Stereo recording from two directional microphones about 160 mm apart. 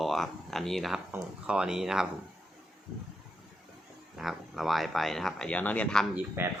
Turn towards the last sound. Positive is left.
turn(degrees=-15)  # may be behind; listen again after turning